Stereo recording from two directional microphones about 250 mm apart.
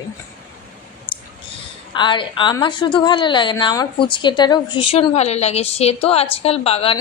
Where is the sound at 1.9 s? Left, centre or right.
Centre.